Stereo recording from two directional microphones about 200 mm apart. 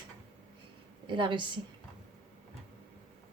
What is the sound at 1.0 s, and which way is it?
Speech, 25° right (ahead or behind).